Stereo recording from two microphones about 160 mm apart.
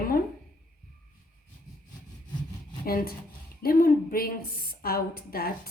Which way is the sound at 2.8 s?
70° left (ahead or behind).